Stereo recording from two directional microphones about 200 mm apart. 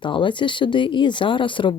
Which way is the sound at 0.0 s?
25° left (ahead or behind).